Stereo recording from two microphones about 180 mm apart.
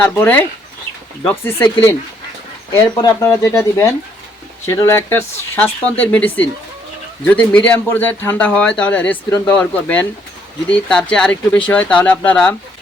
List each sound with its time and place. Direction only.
0.0 s speech: 10° left (ahead or behind)